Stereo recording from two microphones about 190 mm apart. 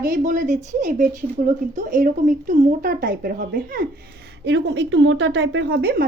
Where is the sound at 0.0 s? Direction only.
45° right (ahead or behind).